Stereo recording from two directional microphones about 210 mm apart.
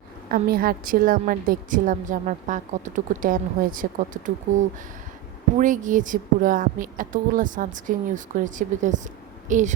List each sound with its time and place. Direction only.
0.3 s a woman's voice: 45° right (ahead or behind)
5.5 s a woman's voice: 40° right (ahead or behind)